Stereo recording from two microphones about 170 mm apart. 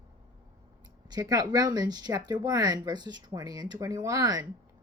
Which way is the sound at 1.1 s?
20° right (ahead or behind).